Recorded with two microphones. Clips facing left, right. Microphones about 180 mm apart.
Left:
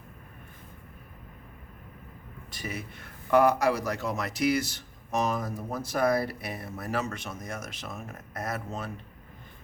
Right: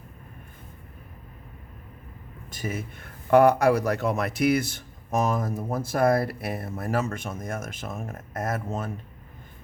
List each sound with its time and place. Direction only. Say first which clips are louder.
2.5 s speech: right 5 dB; 45° right (ahead or behind)